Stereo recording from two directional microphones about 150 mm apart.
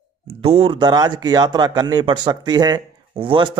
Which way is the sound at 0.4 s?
40° right (ahead or behind).